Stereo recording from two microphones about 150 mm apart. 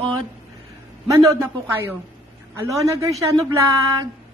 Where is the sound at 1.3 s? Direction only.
15° right (ahead or behind).